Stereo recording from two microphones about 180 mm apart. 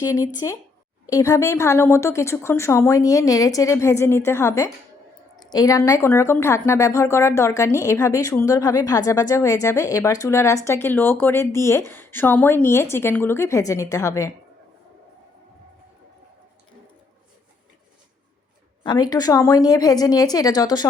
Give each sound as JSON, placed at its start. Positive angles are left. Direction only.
{"t": 0.0, "sound": "a woman's voice", "side_deg": 20}
{"t": 18.8, "sound": "a woman's voice", "side_deg": 25}